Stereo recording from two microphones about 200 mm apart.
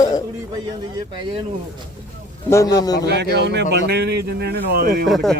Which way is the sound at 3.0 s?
55° right (ahead or behind).